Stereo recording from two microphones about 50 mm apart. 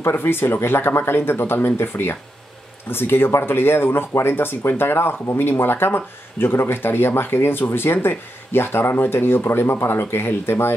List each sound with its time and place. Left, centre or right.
0.0 s speech: left